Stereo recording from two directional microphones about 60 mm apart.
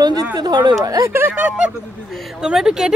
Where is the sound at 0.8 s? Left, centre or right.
Right.